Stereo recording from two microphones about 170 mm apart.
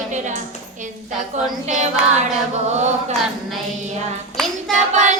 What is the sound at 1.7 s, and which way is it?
Female singing, 45° right (ahead or behind).